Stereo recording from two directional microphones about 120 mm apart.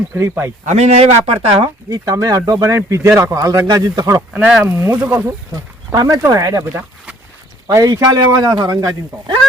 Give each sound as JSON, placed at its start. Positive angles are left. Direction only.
{"t": 0.1, "sound": "speech", "side_deg": -20}
{"t": 0.6, "sound": "speech", "side_deg": -75}
{"t": 1.9, "sound": "speech", "side_deg": -25}
{"t": 4.4, "sound": "speech", "side_deg": -10}
{"t": 5.9, "sound": "a man's voice", "side_deg": -25}